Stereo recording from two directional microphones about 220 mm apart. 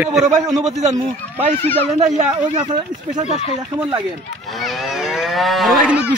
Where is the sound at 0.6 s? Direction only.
30° right (ahead or behind).